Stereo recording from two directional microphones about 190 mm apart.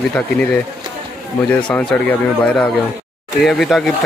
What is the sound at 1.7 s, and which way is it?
Speech, 10° left (ahead or behind).